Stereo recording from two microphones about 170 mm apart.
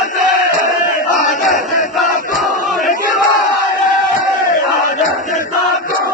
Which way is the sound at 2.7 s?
50° left (ahead or behind).